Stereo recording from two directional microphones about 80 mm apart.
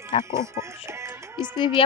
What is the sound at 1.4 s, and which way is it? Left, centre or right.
Speech, left.